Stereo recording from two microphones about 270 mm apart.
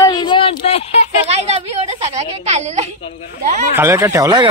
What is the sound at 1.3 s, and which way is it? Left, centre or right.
A woman's voice, right.